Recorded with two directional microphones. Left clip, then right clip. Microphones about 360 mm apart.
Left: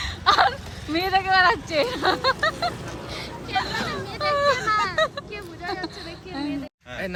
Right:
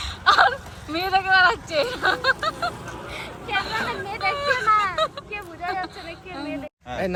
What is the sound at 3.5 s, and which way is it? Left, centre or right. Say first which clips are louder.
Hubbub: right 1 dB; centre.